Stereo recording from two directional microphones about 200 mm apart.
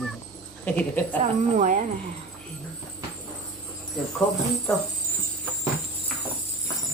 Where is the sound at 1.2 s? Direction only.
40° right (ahead or behind).